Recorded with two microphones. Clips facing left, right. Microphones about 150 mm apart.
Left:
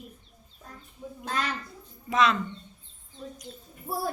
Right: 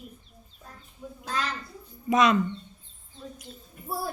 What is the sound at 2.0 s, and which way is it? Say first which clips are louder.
Speech: right 2 dB; 15° right (ahead or behind).